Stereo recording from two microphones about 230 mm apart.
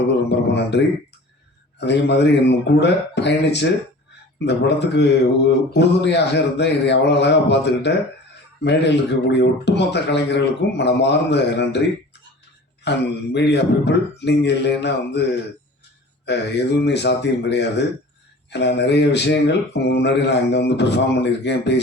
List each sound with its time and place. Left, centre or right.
0.3 s a man's voice: left
12.8 s speech: left